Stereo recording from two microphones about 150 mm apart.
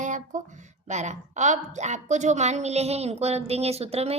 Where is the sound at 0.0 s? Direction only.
55° right (ahead or behind).